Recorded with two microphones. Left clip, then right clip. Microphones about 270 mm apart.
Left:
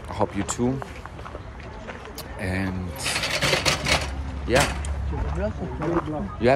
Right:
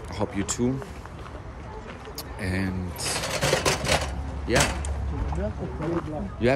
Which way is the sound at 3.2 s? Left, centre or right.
Right.